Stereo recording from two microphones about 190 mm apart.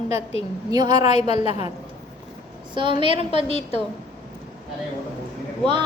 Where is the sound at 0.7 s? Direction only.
20° right (ahead or behind).